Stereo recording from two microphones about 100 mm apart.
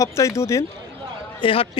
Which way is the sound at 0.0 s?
30° left (ahead or behind).